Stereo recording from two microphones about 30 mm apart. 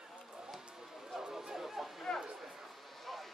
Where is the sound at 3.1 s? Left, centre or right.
Centre.